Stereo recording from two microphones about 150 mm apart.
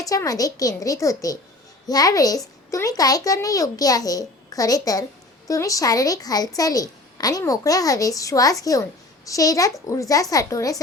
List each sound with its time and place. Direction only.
0.0 s a child's voice: 25° left (ahead or behind)